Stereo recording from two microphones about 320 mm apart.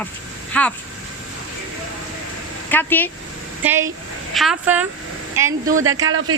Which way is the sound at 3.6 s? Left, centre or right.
Centre.